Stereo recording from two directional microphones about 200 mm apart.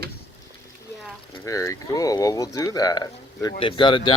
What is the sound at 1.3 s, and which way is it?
Speech, 15° left (ahead or behind).